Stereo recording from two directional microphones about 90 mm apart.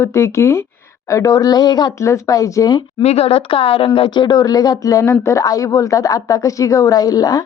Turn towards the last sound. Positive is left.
turn(degrees=45)  # may be behind; listen again after turning